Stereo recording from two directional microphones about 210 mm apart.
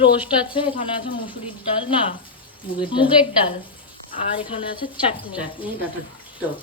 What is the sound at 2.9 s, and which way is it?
Speech, 25° left (ahead or behind).